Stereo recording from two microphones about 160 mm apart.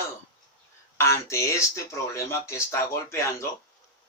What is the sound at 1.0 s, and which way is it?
Speech, 20° left (ahead or behind).